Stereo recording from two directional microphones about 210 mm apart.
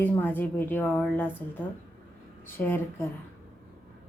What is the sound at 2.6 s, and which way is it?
Speech, 10° left (ahead or behind).